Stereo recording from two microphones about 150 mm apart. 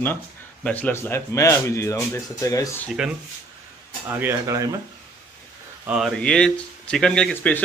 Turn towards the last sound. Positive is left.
turn(degrees=10)  # may be behind; listen again after turning